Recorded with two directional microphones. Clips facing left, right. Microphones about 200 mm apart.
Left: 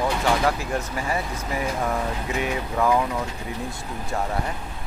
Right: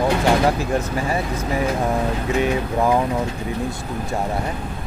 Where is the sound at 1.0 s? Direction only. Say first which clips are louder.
Right 5 dB; 25° right (ahead or behind).